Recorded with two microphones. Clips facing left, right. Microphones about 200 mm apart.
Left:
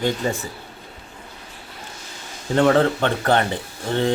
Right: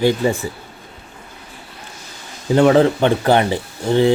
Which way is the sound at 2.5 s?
10° right (ahead or behind).